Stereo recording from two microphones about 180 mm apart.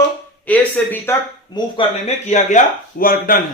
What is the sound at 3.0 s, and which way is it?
Speech, 50° left (ahead or behind).